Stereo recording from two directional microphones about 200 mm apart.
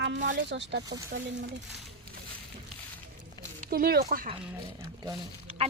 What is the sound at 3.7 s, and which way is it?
Speech, 50° right (ahead or behind).